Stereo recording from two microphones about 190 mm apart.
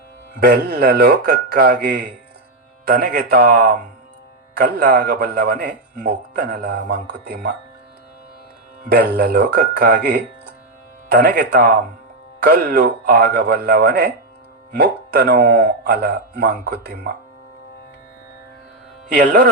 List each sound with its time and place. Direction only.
0.3 s a man's voice: 55° right (ahead or behind)
8.8 s a man's voice: 55° right (ahead or behind)
19.0 s mantra: 55° right (ahead or behind)